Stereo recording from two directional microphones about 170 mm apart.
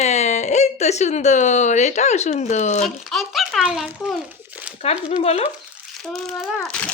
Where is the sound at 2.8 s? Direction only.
Centre (ahead or behind).